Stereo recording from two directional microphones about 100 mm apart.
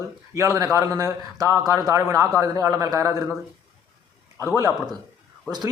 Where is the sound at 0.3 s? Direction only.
30° right (ahead or behind).